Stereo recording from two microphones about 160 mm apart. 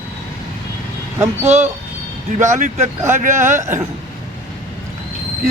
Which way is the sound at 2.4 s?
50° right (ahead or behind).